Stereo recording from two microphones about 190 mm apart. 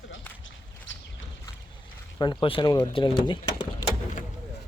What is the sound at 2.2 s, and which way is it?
Speech, 25° left (ahead or behind).